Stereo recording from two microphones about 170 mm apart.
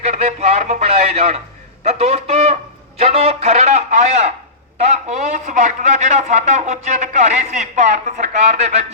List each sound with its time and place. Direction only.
0.0 s a man's voice: 40° right (ahead or behind)